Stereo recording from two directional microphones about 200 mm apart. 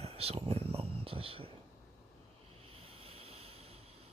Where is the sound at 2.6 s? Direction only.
30° right (ahead or behind).